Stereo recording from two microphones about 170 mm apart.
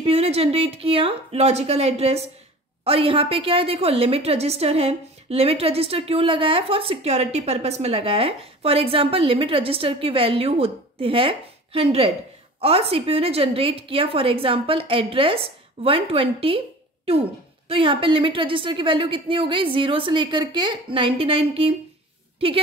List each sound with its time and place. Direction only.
0.0 s a woman's voice: 35° right (ahead or behind)